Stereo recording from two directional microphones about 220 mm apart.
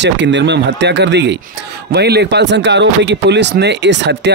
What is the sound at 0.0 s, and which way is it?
Speech, 55° right (ahead or behind).